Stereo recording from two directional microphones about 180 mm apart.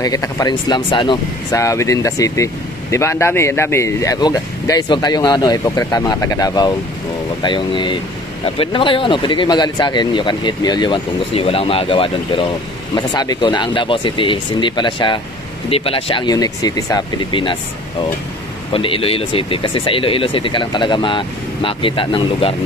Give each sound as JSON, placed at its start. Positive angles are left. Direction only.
{"t": 0.0, "sound": "speech", "side_deg": 20}
{"t": 18.7, "sound": "speech", "side_deg": 30}